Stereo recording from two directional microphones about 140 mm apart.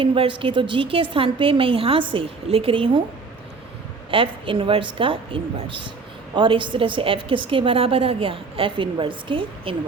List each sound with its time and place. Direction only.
0.0 s a woman's voice: 35° right (ahead or behind)
4.1 s a woman's voice: 40° right (ahead or behind)